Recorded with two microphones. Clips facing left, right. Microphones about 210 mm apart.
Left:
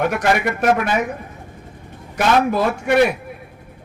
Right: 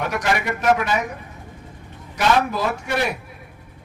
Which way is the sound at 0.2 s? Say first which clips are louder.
Left 5 dB; 55° left (ahead or behind).